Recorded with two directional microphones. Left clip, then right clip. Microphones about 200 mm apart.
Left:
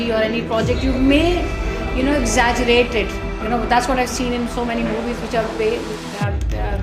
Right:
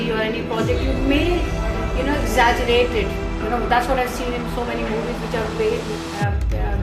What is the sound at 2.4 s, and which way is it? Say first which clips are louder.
Speech: even; 30° left (ahead or behind).